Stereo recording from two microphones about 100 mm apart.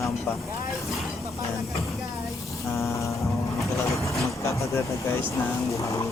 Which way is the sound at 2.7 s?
30° left (ahead or behind).